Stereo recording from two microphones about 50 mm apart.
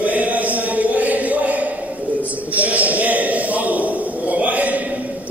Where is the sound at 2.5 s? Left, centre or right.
Right.